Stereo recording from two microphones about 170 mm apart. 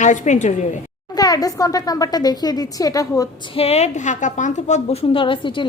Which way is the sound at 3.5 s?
35° left (ahead or behind).